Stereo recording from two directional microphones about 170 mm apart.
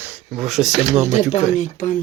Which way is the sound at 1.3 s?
45° left (ahead or behind).